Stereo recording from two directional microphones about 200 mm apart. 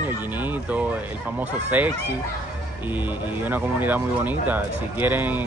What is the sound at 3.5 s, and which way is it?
Speech, 10° right (ahead or behind).